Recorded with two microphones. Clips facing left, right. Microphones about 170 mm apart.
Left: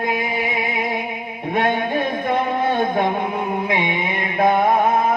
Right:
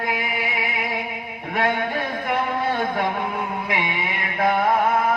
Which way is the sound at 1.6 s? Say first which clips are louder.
Left 3 dB; 20° left (ahead or behind).